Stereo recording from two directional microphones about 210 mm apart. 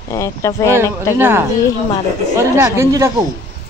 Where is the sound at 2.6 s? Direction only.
15° right (ahead or behind).